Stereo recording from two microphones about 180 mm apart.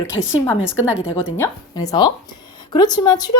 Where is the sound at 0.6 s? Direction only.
5° right (ahead or behind).